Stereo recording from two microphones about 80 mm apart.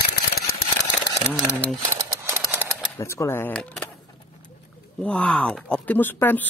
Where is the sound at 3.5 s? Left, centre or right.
Centre.